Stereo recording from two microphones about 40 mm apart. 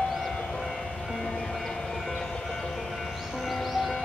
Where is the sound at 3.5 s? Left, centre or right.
Centre.